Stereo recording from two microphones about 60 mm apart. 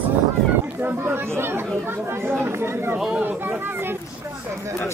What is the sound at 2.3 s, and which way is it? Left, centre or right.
Speech, right.